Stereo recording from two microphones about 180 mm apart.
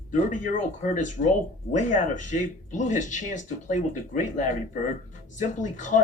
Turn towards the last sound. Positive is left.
turn(degrees=45)  # may be behind; listen again after turning